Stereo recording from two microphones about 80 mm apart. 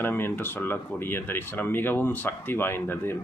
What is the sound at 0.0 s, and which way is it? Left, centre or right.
Speech, left.